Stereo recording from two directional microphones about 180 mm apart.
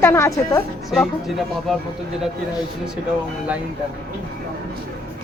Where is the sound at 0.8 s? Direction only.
Centre (ahead or behind).